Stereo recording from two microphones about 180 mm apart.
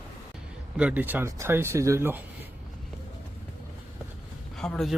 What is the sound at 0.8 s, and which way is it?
Speech, 10° right (ahead or behind).